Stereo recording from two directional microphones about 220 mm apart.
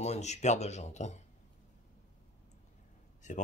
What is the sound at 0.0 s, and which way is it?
Speech, 30° left (ahead or behind).